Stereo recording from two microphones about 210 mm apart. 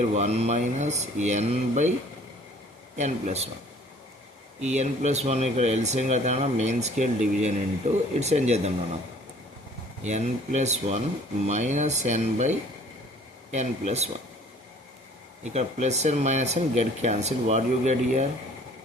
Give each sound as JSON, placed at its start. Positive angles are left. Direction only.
{"t": 0.1, "sound": "speech", "side_deg": -30}
{"t": 3.0, "sound": "speech", "side_deg": -30}
{"t": 4.6, "sound": "speech", "side_deg": -35}
{"t": 10.0, "sound": "speech", "side_deg": -35}
{"t": 15.4, "sound": "speech", "side_deg": -35}